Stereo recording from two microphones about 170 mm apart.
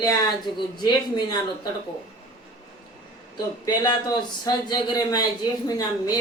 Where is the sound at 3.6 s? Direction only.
25° left (ahead or behind).